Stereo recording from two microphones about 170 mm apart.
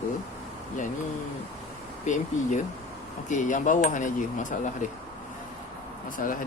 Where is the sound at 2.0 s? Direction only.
45° left (ahead or behind).